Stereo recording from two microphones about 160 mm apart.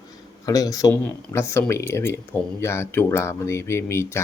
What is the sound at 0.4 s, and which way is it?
A man's voice, 20° left (ahead or behind).